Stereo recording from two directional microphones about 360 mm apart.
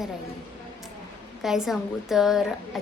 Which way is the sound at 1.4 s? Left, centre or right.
Centre.